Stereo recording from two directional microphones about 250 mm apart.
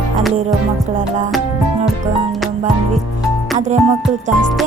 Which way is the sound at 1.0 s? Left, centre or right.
Right.